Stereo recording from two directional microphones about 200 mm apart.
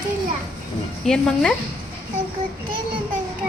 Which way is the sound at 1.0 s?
5° left (ahead or behind).